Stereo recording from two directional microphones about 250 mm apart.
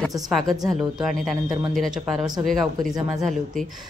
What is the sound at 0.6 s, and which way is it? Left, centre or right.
Speech, centre.